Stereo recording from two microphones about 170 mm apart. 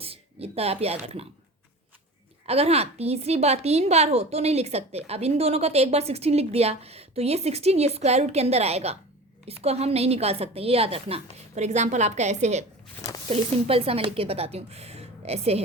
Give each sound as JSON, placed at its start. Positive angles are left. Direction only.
{"t": 0.0, "sound": "speech", "side_deg": -35}
{"t": 2.5, "sound": "a woman's voice", "side_deg": -35}
{"t": 13.0, "sound": "a sound", "side_deg": 20}
{"t": 13.3, "sound": "a woman's voice", "side_deg": -35}